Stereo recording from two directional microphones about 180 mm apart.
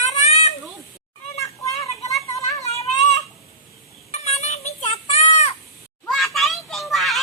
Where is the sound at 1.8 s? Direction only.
20° left (ahead or behind).